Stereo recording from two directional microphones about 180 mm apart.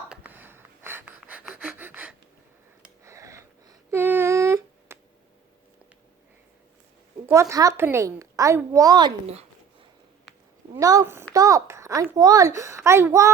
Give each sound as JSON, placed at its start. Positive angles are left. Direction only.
{"t": 0.1, "sound": "a sound", "side_deg": -10}
{"t": 7.3, "sound": "a child's voice", "side_deg": -15}
{"t": 10.8, "sound": "a child's voice", "side_deg": -20}